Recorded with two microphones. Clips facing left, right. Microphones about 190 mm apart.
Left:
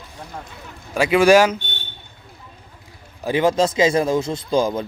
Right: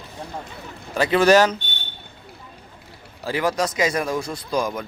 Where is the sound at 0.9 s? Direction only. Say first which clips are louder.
Left 2 dB; 10° left (ahead or behind).